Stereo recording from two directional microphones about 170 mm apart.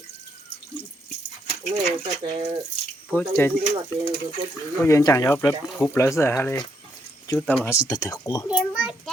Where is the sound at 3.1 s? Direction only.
15° left (ahead or behind).